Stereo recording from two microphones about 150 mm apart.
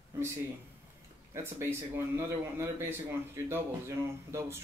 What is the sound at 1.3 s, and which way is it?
A man's voice, 15° right (ahead or behind).